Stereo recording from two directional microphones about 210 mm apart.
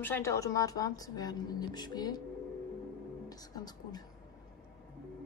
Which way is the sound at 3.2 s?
20° left (ahead or behind).